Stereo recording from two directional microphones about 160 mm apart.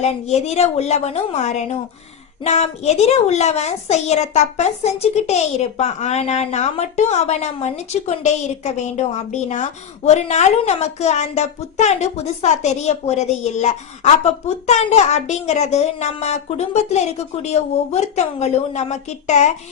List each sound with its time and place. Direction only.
0.0 s a child's voice: 45° left (ahead or behind)